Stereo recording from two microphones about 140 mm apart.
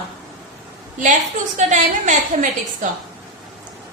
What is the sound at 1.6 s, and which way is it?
A woman's voice, 60° right (ahead or behind).